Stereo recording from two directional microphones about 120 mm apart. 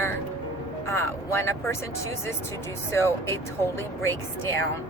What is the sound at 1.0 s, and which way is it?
Speech, 20° left (ahead or behind).